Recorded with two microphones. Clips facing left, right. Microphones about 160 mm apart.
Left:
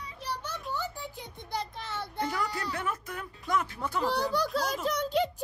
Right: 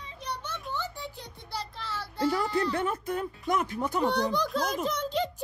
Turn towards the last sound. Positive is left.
turn(degrees=10)  # may be behind; listen again after turning